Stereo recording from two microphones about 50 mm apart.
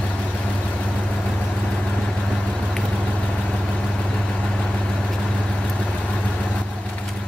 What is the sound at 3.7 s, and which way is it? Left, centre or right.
Vehicle, centre.